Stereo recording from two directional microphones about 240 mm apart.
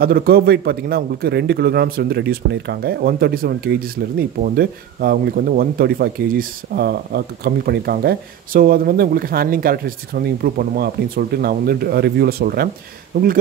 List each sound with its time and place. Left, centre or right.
0.0 s a man's voice: right